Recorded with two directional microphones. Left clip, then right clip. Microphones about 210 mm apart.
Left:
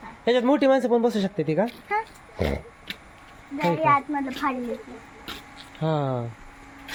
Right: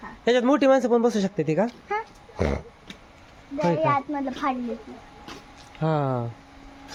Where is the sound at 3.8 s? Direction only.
40° right (ahead or behind).